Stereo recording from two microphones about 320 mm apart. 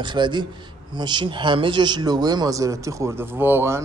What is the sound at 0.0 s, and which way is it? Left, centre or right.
A man's voice, centre.